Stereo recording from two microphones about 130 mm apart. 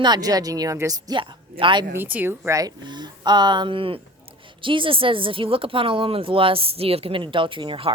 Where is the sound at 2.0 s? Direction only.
15° right (ahead or behind).